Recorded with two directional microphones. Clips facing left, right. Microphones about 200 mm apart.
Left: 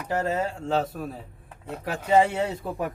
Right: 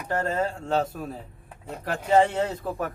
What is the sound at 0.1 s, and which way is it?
Speech, 5° left (ahead or behind).